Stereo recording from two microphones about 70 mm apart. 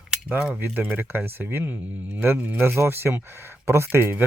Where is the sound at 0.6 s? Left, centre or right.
Right.